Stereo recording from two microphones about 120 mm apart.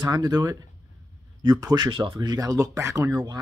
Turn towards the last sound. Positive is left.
turn(degrees=-25)  # may be behind; listen again after turning